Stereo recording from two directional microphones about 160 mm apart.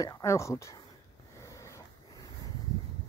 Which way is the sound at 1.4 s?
20° left (ahead or behind).